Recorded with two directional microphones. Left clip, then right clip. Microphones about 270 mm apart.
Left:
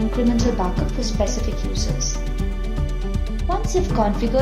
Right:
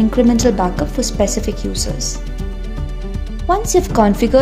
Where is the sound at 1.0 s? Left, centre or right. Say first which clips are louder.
Right 5 dB; right.